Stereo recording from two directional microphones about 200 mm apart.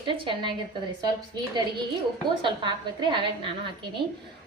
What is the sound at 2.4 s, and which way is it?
A woman's voice, 20° right (ahead or behind).